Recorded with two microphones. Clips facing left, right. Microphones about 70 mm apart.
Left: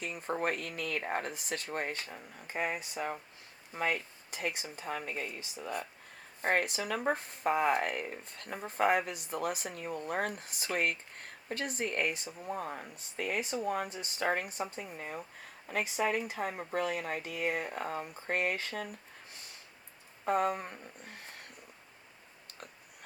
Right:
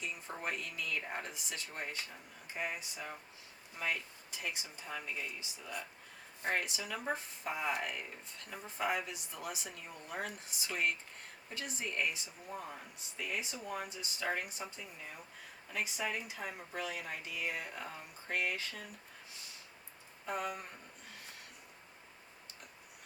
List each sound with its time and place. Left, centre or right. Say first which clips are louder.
0.0 s speech: left 7 dB; left
20.2 s speech: left 9 dB; left